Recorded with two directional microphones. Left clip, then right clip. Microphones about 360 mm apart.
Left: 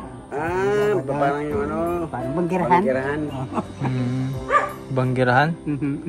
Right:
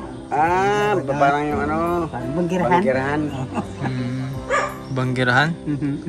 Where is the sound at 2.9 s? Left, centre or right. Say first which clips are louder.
Right 2 dB; right.